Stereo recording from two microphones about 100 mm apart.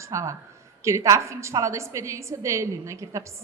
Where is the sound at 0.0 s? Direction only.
30° right (ahead or behind).